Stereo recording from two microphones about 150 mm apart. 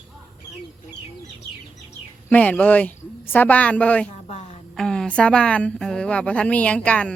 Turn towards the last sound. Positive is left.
turn(degrees=10)  # may be behind; listen again after turning